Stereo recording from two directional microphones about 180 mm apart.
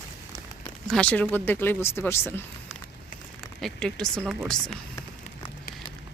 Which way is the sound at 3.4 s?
5° left (ahead or behind).